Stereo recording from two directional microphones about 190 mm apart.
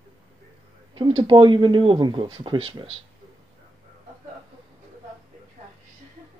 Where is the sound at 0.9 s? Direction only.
25° right (ahead or behind).